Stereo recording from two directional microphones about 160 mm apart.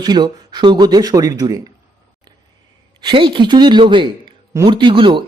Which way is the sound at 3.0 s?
30° right (ahead or behind).